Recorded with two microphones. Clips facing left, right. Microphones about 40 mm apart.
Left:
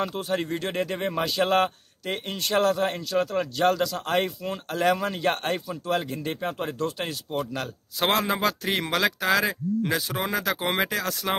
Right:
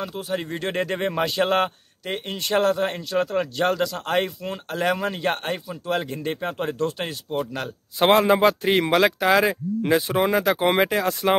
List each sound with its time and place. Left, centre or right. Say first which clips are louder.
0.0 s speech: left 2 dB; centre
0.3 s speech: right 1 dB; centre
0.6 s a man's voice: right 3 dB; right
2.3 s speech: right 2 dB; right
3.0 s speech: right 2 dB; right